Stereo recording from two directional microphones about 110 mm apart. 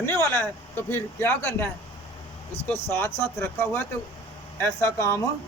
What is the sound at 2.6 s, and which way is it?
Speech, 20° left (ahead or behind).